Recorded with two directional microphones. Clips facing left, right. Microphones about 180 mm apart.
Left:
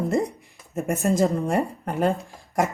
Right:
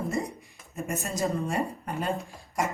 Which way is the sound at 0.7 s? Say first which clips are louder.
Left 10 dB; 60° left (ahead or behind).